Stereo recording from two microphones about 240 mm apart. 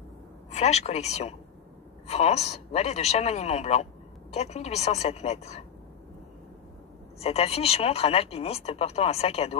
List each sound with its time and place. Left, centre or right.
0.5 s speech: left
7.2 s speech: left